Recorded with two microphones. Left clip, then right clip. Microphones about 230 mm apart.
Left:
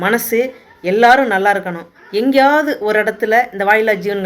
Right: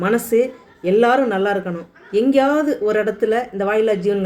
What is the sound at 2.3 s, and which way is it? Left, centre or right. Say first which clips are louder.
Speech: left 8 dB; centre.